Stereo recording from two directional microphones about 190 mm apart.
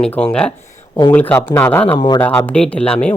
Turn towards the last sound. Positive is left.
turn(degrees=5)  # may be behind; listen again after turning